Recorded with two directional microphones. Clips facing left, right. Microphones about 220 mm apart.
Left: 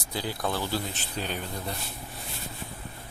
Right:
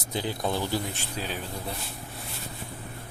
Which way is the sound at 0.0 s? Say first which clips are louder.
Right 2 dB; 20° right (ahead or behind).